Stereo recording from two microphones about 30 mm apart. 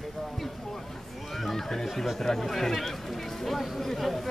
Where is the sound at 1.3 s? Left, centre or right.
Centre.